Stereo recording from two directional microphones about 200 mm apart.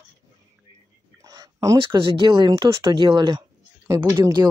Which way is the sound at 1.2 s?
15° right (ahead or behind).